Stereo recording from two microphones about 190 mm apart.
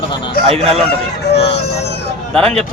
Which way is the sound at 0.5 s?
30° right (ahead or behind).